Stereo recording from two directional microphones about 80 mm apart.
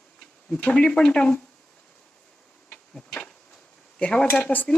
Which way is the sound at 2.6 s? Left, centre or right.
Centre.